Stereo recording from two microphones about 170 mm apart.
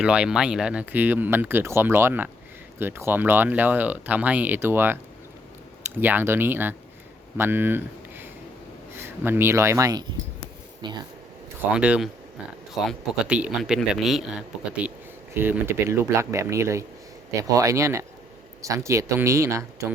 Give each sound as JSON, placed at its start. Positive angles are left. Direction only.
{"t": 0.0, "sound": "speech", "side_deg": -5}
{"t": 6.0, "sound": "speech", "side_deg": -10}
{"t": 11.7, "sound": "speech", "side_deg": -5}